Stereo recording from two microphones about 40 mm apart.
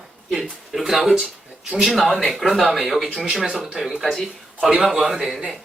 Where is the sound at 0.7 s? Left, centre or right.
Centre.